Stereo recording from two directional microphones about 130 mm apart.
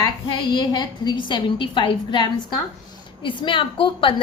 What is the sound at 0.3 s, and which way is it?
A woman's voice, 30° left (ahead or behind).